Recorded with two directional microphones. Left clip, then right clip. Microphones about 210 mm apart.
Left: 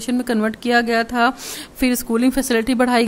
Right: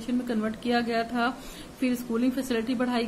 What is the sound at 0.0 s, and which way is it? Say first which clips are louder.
Speech: left 9 dB; 55° left (ahead or behind).